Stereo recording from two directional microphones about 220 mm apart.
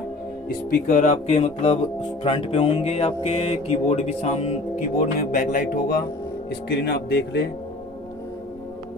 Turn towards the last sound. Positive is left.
turn(degrees=45)  # may be behind; listen again after turning